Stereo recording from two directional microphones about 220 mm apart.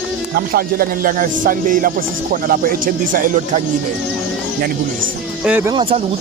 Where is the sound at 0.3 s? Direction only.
45° right (ahead or behind).